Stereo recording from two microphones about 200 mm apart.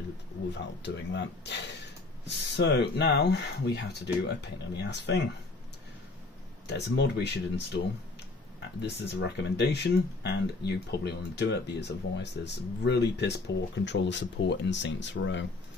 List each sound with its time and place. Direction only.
0.6 s speech: 65° left (ahead or behind)
6.7 s speech: 60° left (ahead or behind)
8.8 s speech: 55° left (ahead or behind)